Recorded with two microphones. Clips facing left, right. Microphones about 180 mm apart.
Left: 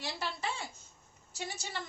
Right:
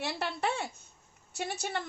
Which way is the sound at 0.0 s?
65° right (ahead or behind).